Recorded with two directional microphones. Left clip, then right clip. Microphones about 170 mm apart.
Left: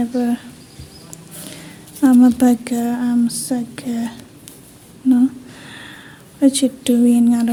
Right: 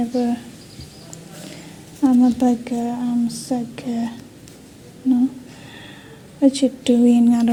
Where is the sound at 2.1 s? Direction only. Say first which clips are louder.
Left 4 dB; 20° left (ahead or behind).